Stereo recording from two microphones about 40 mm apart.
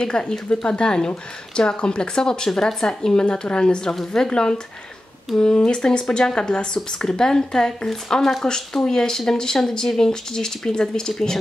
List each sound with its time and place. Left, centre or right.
0.0 s speech: left